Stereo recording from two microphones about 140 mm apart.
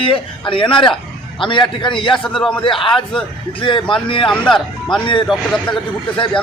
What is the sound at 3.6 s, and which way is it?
Speech, 40° left (ahead or behind).